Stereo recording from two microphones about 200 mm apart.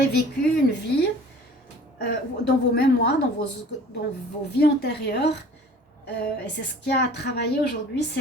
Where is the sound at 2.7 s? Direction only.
55° left (ahead or behind).